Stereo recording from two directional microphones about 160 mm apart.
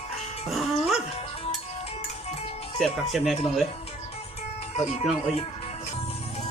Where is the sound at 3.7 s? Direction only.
40° left (ahead or behind).